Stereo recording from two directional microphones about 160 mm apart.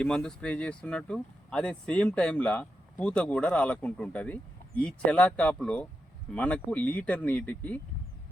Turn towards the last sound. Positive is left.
turn(degrees=10)  # may be behind; listen again after turning